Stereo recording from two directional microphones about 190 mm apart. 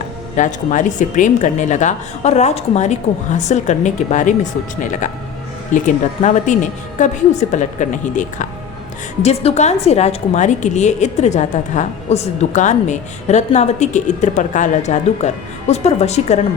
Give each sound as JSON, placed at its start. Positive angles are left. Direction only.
{"t": 0.3, "sound": "a woman's voice", "side_deg": 40}